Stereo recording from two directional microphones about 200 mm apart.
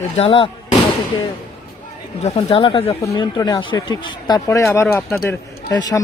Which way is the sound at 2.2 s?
25° left (ahead or behind).